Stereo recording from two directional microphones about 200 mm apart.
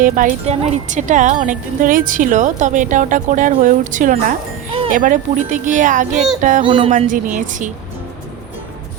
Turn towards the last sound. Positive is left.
turn(degrees=-40)  # may be behind; listen again after turning